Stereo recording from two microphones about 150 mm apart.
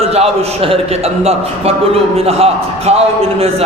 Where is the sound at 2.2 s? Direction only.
40° right (ahead or behind).